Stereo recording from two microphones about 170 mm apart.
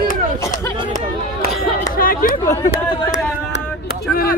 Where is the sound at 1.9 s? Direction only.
55° left (ahead or behind).